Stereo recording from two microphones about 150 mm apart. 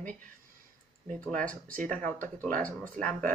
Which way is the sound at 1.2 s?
10° left (ahead or behind).